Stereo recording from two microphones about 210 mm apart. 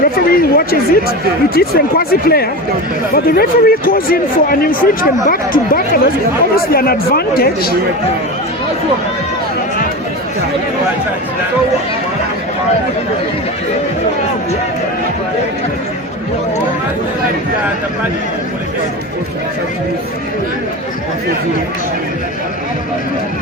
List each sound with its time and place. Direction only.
0.0 s a man's voice: 45° left (ahead or behind)